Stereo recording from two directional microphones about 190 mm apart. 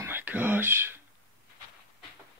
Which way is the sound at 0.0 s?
10° right (ahead or behind).